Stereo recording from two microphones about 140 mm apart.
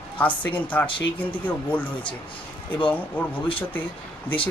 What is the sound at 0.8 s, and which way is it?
Speech, 35° left (ahead or behind).